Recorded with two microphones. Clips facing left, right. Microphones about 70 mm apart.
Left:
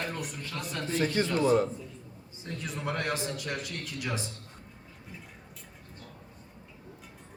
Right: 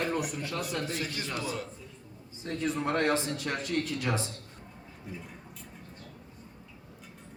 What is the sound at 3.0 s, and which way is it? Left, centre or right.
Speech, right.